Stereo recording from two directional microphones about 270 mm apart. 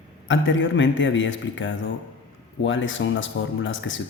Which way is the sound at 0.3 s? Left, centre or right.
Left.